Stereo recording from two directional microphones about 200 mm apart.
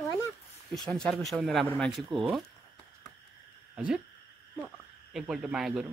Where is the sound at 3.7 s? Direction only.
5° right (ahead or behind).